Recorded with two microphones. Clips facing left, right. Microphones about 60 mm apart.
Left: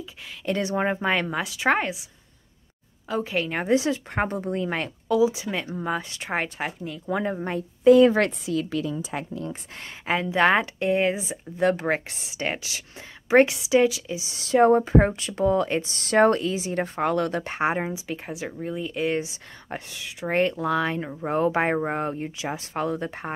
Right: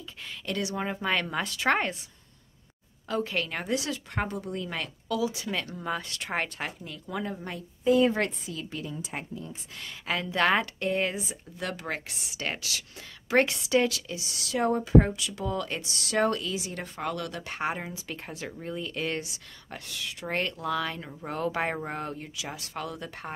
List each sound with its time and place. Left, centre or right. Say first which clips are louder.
0.5 s speech: left 7 dB; left
1.0 s a woman's voice: left 4 dB; centre
3.1 s speech: left 3 dB; centre
4.3 s speech: left 7 dB; left; by 7.0 s centre
7.1 s speech: left 8 dB; left
7.8 s a woman's voice: left 8 dB; left
9.5 s speech: left 5 dB; left
10.0 s speech: left 5 dB; left
12.4 s speech: left 5 dB; centre
14.4 s speech: left 10 dB; left
17.9 s speech: left 6 dB; centre
19.2 s speech: left 6 dB; left